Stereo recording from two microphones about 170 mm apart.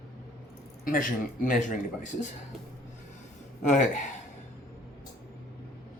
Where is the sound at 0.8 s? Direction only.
55° left (ahead or behind).